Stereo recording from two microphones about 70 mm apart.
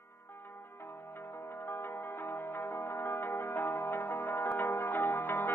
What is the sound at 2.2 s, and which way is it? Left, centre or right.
Music, left.